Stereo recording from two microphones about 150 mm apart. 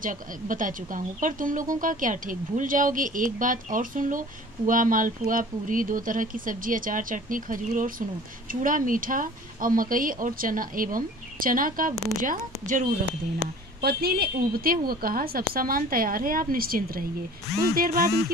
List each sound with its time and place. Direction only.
0.0 s speech: 65° right (ahead or behind)
11.9 s a woman's voice: 20° right (ahead or behind)
12.2 s speech: 60° right (ahead or behind)
13.7 s speech: 90° right